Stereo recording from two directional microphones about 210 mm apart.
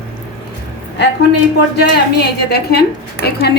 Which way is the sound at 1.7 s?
50° left (ahead or behind).